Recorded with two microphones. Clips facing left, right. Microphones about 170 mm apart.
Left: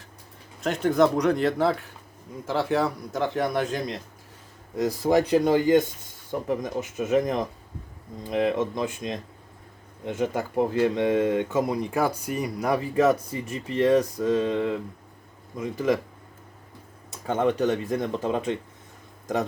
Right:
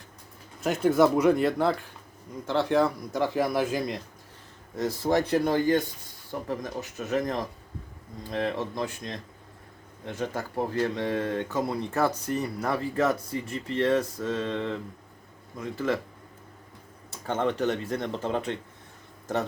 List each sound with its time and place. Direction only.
0.6 s speech: centre (ahead or behind)
4.8 s speech: 15° left (ahead or behind)
17.2 s speech: 15° left (ahead or behind)